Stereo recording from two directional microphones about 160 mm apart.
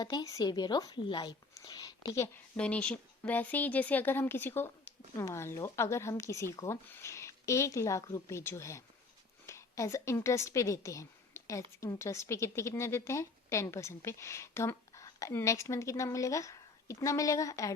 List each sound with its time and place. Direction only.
0.0 s a woman's voice: 25° left (ahead or behind)